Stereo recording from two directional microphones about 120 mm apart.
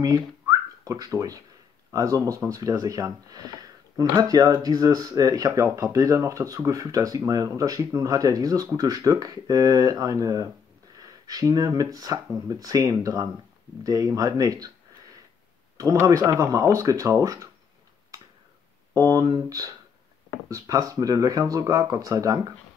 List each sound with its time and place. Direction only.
0.0 s speech: 30° right (ahead or behind)
15.8 s speech: 25° right (ahead or behind)
18.9 s speech: 30° right (ahead or behind)